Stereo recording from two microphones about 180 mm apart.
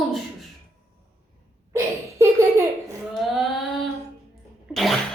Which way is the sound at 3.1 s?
Centre (ahead or behind).